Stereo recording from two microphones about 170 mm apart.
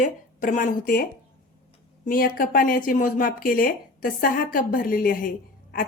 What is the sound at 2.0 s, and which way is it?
A woman's voice, 55° left (ahead or behind).